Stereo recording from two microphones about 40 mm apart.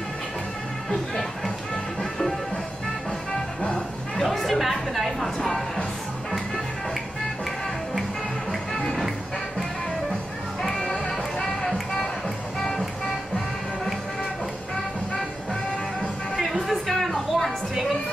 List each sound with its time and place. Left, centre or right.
0.8 s music: centre
4.2 s chatter: centre
10.7 s music: centre
16.6 s a sound: centre